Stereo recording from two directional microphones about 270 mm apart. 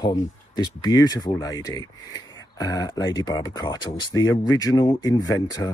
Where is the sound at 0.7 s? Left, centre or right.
Centre.